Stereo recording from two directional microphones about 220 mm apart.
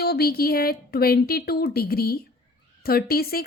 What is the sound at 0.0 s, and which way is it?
A woman's voice, 45° left (ahead or behind).